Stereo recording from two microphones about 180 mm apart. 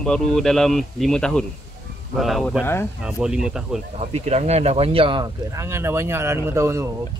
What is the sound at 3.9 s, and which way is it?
Speech, 35° right (ahead or behind).